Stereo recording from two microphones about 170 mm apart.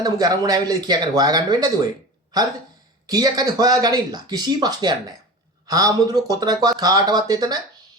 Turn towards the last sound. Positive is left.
turn(degrees=-25)  # may be behind; listen again after turning